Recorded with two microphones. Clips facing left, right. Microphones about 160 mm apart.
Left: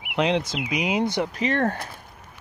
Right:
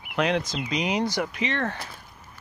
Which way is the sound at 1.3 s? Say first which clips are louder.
Left 5 dB; 40° left (ahead or behind).